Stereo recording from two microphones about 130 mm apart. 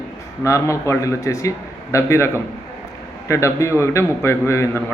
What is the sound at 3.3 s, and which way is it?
A man's voice, 20° left (ahead or behind).